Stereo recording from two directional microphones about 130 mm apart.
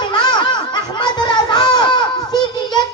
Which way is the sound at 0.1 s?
35° left (ahead or behind).